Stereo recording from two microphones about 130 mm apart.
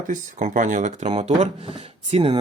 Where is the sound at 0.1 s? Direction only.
75° right (ahead or behind).